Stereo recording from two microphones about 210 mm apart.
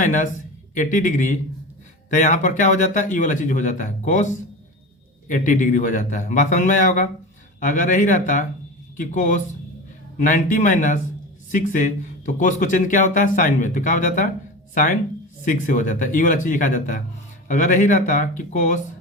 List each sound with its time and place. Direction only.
0.0 s a sound: 35° left (ahead or behind)
0.7 s speech: 35° left (ahead or behind)
5.3 s speech: 35° left (ahead or behind)
15.4 s speech: 40° left (ahead or behind)